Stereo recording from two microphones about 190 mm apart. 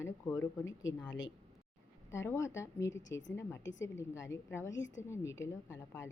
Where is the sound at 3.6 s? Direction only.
75° left (ahead or behind).